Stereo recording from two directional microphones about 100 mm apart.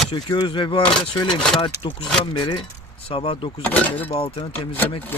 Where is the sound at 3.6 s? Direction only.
15° left (ahead or behind).